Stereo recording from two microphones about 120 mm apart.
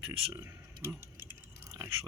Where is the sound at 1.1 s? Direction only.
25° right (ahead or behind).